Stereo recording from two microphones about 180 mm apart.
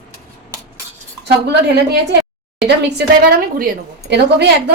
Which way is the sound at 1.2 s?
65° right (ahead or behind).